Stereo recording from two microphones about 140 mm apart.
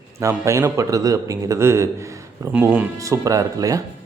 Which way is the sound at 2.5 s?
10° right (ahead or behind).